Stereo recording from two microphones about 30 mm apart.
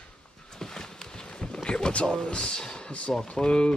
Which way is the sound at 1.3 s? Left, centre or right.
Left.